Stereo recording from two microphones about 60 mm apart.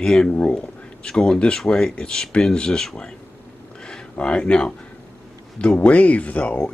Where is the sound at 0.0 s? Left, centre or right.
Centre.